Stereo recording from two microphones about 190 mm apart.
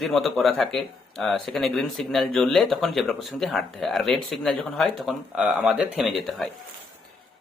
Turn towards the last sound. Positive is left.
turn(degrees=0)  # may be behind; listen again after turning